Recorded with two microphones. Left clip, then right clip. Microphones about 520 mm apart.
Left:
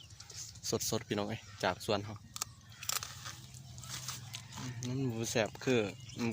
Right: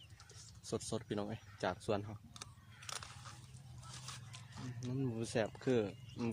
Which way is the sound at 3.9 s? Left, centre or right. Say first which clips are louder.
Left 9 dB; right.